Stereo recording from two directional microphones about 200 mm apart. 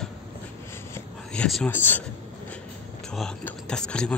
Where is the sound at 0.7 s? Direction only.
10° left (ahead or behind).